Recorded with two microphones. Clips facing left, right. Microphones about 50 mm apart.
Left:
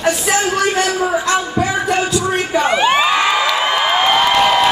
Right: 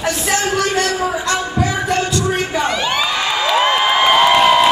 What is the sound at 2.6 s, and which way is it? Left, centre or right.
Crowd, left.